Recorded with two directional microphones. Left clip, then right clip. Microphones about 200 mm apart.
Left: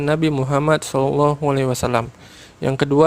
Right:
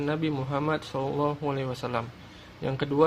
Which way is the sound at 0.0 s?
50° left (ahead or behind).